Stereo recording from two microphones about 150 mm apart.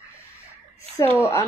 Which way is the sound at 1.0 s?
15° left (ahead or behind).